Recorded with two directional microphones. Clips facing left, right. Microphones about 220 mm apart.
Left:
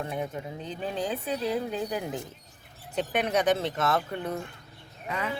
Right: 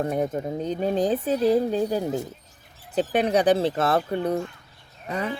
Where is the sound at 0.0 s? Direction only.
40° right (ahead or behind).